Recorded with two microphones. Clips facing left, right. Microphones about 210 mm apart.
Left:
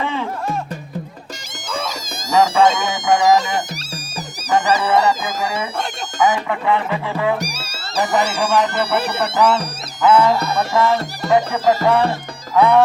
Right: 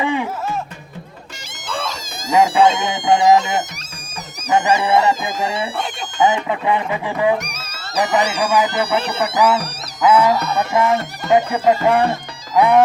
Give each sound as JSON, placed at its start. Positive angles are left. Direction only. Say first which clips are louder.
{"t": 0.0, "sound": "music", "louder": "right 3 dB", "side_deg": -15}
{"t": 2.3, "sound": "speech", "louder": "right 1 dB", "side_deg": -15}
{"t": 4.5, "sound": "speech", "louder": "right 1 dB", "side_deg": -20}
{"t": 7.3, "sound": "music", "louder": "left 1 dB", "side_deg": 30}
{"t": 8.0, "sound": "speech", "louder": "even", "side_deg": -5}
{"t": 8.9, "sound": "speech", "louder": "even", "side_deg": 5}
{"t": 9.2, "sound": "speech", "louder": "right 1 dB", "side_deg": -10}